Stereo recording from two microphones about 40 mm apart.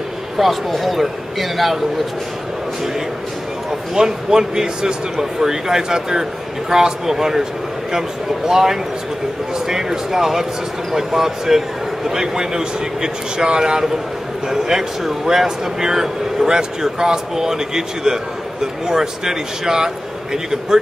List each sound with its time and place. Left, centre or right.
0.4 s a man's voice: centre
3.9 s speech: centre
8.5 s speech: centre